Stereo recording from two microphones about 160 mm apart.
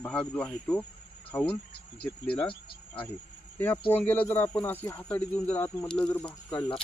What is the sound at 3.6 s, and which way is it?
Speech, 10° left (ahead or behind).